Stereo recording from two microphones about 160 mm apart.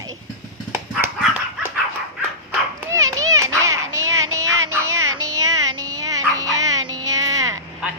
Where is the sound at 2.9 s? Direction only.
20° right (ahead or behind).